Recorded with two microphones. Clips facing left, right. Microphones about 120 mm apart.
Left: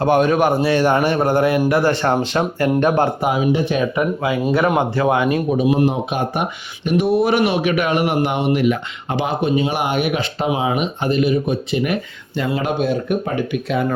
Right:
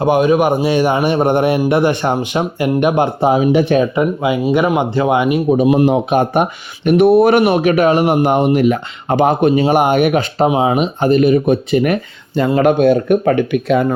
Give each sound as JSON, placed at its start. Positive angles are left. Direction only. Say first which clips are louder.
{"t": 0.0, "sound": "a man's voice", "louder": "right 3 dB", "side_deg": -10}
{"t": 3.2, "sound": "speech", "louder": "right 5 dB", "side_deg": -30}
{"t": 5.7, "sound": "speech", "louder": "right 5 dB", "side_deg": -90}
{"t": 6.1, "sound": "speech", "louder": "right 7 dB", "side_deg": -50}
{"t": 10.5, "sound": "speech", "louder": "right 5 dB", "side_deg": -30}
{"t": 11.1, "sound": "speech", "louder": "right 6 dB", "side_deg": -55}